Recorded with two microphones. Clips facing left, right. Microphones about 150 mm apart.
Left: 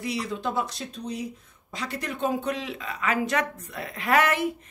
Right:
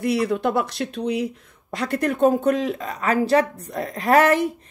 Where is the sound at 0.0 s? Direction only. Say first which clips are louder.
Right 9 dB; 60° right (ahead or behind).